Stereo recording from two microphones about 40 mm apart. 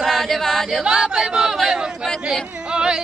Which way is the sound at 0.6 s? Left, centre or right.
Centre.